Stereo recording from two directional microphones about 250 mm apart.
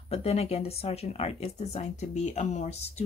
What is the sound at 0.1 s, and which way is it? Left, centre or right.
Speech, left.